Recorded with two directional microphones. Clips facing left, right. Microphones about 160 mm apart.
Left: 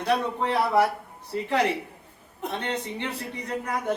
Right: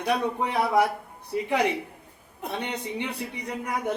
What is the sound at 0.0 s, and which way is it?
A man's voice, 10° right (ahead or behind).